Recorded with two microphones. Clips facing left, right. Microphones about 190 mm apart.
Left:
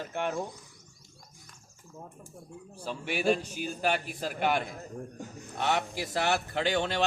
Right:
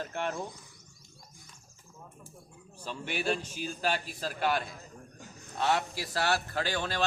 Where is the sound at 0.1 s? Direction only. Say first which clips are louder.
Left 5 dB; 10° left (ahead or behind).